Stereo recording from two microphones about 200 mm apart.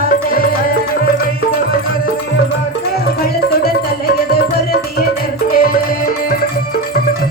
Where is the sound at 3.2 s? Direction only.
50° left (ahead or behind).